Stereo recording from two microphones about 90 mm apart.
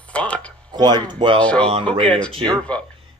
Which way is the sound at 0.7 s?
55° right (ahead or behind).